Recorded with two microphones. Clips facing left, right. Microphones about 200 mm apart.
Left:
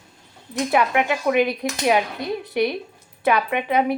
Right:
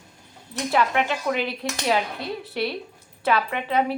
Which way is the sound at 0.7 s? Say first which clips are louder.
Left 2 dB; 15° left (ahead or behind).